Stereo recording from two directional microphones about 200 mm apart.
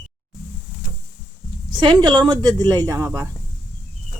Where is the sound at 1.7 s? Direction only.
20° right (ahead or behind).